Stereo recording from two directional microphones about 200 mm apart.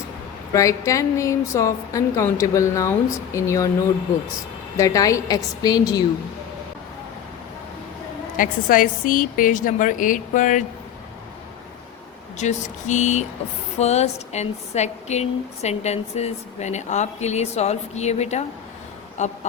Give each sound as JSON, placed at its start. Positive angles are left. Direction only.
{"t": 0.5, "sound": "a woman's voice", "side_deg": 15}
{"t": 4.8, "sound": "a woman's voice", "side_deg": 15}
{"t": 8.4, "sound": "speech", "side_deg": 45}
{"t": 12.4, "sound": "speech", "side_deg": 35}